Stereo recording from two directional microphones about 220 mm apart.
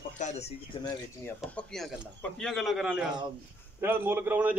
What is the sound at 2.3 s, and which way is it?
A man's voice, centre (ahead or behind).